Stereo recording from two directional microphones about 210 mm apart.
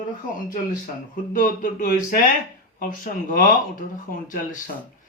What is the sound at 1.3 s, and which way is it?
Speech, 40° left (ahead or behind).